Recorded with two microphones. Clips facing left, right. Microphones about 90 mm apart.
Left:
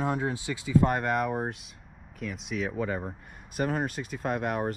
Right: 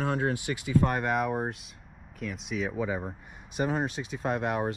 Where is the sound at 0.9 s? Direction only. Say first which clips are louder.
Even; centre (ahead or behind).